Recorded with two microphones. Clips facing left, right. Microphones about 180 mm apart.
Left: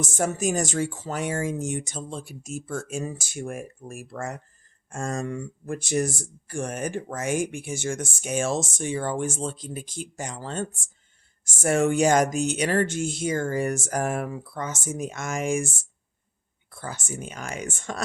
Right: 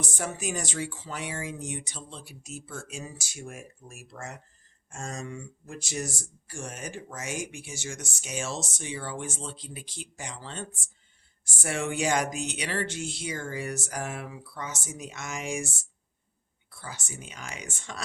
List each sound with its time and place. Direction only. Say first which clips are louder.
0.0 s speech: left 8 dB; 45° left (ahead or behind)